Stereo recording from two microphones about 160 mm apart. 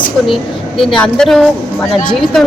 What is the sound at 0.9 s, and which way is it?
Speech, 5° left (ahead or behind).